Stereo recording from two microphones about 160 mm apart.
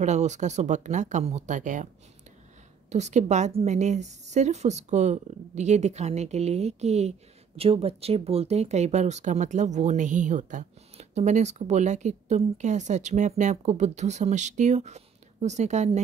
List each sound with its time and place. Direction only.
0.0 s a woman's voice: 45° right (ahead or behind)
2.9 s a woman's voice: 45° right (ahead or behind)